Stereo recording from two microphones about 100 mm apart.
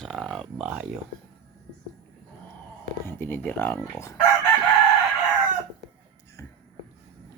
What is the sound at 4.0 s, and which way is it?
Chicken, 35° left (ahead or behind).